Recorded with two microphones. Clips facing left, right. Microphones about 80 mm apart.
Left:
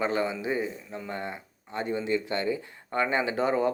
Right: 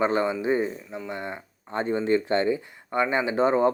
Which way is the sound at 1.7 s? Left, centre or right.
Right.